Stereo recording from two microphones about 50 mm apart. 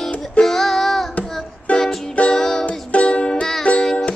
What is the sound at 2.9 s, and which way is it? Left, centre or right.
Music, left.